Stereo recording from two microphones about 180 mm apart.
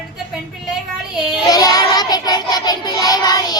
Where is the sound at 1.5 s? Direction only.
20° left (ahead or behind).